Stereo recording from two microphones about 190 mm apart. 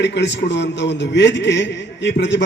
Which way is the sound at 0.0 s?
65° left (ahead or behind).